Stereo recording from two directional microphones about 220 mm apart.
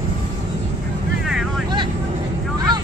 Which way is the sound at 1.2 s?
Centre (ahead or behind).